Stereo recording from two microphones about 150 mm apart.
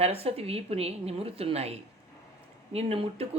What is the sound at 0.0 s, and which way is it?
A woman's voice, 40° right (ahead or behind).